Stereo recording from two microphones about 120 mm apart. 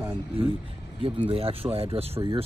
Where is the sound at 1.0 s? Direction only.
50° right (ahead or behind).